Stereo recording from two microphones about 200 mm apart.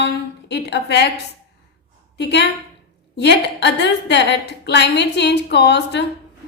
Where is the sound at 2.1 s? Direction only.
60° left (ahead or behind).